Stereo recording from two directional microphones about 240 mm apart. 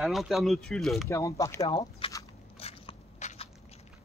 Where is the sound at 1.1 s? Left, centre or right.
Centre.